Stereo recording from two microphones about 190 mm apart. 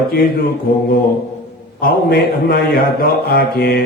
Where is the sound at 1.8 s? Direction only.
50° left (ahead or behind).